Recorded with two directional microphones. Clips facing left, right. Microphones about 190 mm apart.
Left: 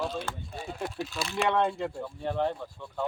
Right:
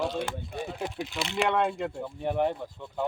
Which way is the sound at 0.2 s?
15° right (ahead or behind).